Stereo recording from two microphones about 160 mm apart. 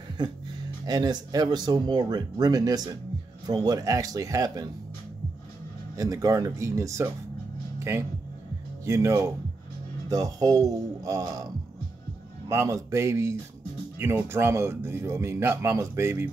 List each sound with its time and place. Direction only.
0.2 s speech: 25° right (ahead or behind)
5.9 s speech: 20° right (ahead or behind)
8.8 s speech: 20° right (ahead or behind)
12.4 s speech: 20° right (ahead or behind)